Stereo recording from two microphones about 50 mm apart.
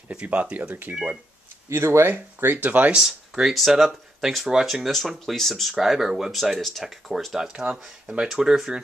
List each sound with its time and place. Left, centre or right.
0.1 s speech: right
1.7 s speech: right
3.0 s speech: centre
7.3 s speech: centre